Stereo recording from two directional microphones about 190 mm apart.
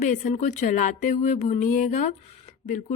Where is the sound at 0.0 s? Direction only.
40° left (ahead or behind).